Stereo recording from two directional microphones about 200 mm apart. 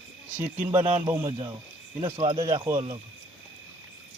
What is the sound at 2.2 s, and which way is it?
Wild animals, 25° right (ahead or behind).